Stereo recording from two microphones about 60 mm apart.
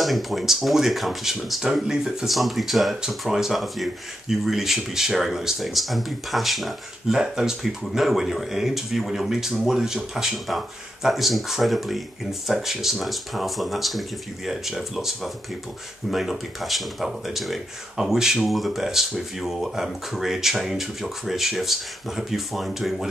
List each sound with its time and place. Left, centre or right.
0.0 s speech: centre